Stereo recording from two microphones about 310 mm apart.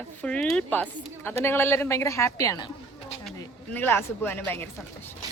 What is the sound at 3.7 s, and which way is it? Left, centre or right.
Speech, centre.